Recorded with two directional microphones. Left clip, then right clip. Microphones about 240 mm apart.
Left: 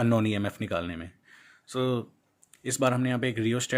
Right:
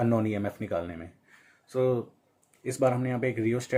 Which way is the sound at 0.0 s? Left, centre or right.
Left.